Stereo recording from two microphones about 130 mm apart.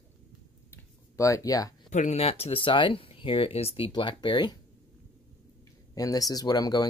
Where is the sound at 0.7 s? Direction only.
25° left (ahead or behind).